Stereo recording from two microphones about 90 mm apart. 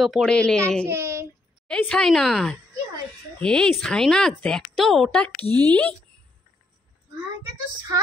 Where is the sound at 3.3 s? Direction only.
10° left (ahead or behind).